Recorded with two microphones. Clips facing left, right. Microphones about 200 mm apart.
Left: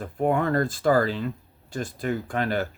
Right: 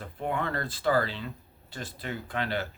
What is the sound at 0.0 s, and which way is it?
Speech, 45° left (ahead or behind).